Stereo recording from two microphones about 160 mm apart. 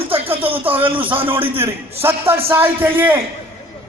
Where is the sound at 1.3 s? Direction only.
15° right (ahead or behind).